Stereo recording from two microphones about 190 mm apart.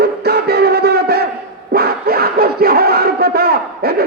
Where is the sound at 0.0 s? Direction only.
55° right (ahead or behind).